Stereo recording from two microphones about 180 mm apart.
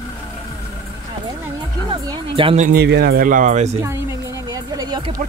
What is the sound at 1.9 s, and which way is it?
Music, 25° right (ahead or behind).